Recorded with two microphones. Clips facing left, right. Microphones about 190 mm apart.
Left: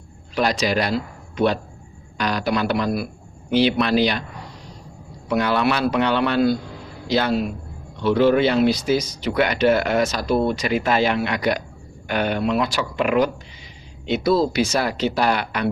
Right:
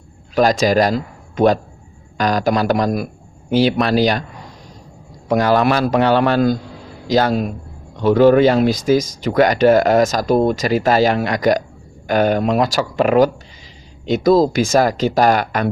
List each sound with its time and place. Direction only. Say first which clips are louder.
0.3 s a man's voice: right 7 dB; 45° right (ahead or behind)
5.3 s speech: right 5 dB; 40° right (ahead or behind)